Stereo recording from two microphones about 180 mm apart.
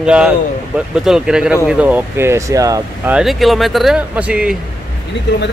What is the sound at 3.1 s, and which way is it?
Speech, centre (ahead or behind).